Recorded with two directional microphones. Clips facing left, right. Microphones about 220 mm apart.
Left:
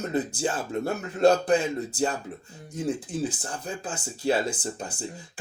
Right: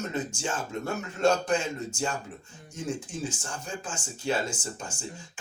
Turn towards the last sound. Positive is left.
turn(degrees=35)  # may be behind; listen again after turning